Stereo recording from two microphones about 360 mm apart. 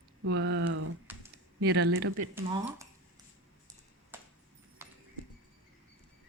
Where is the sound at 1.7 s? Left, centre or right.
Right.